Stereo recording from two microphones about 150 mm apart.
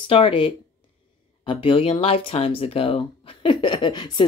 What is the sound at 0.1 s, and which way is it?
Speech, 40° left (ahead or behind).